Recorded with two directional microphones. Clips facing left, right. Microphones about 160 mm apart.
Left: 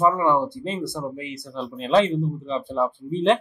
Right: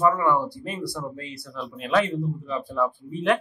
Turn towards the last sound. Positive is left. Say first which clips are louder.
# left 3 dB
turn(degrees=25)  # may be behind; listen again after turning